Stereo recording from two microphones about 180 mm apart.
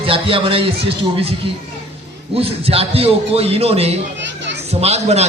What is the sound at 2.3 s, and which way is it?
A man's voice, 35° right (ahead or behind).